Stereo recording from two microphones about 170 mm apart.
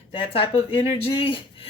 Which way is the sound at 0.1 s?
30° left (ahead or behind).